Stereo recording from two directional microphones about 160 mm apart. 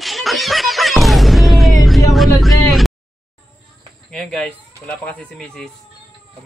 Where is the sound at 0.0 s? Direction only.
Centre (ahead or behind).